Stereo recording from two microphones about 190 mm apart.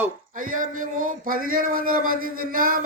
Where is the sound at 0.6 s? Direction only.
45° right (ahead or behind).